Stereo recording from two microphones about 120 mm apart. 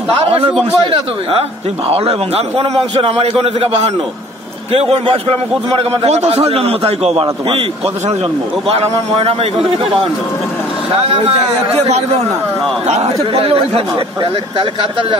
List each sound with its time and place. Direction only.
0.2 s a man's voice: 55° right (ahead or behind)
1.9 s a man's voice: 55° right (ahead or behind)
8.6 s a man's voice: 60° right (ahead or behind)
11.1 s a man's voice: 55° right (ahead or behind)
13.3 s speech: 55° right (ahead or behind)